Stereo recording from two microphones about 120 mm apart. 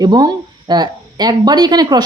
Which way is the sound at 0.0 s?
35° right (ahead or behind).